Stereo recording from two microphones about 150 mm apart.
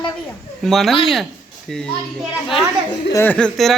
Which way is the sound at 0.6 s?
Centre (ahead or behind).